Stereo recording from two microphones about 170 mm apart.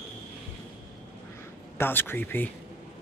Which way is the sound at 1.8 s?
10° left (ahead or behind).